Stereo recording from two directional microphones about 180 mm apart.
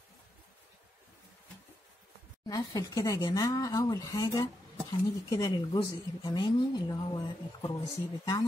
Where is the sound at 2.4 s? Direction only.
20° left (ahead or behind).